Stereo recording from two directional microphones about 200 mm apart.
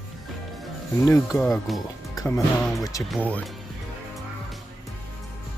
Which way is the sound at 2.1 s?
15° left (ahead or behind).